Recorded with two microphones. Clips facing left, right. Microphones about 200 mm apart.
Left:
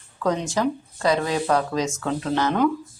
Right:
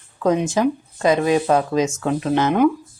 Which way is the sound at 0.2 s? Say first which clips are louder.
Right 5 dB; 20° right (ahead or behind).